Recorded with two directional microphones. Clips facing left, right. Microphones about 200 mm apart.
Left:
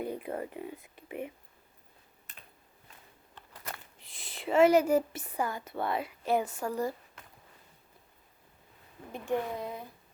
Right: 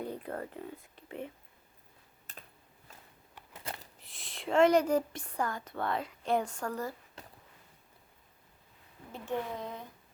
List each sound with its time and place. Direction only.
0.0 s speech: 10° left (ahead or behind)
3.5 s a sound: 30° right (ahead or behind)
4.0 s speech: centre (ahead or behind)
9.1 s speech: 10° left (ahead or behind)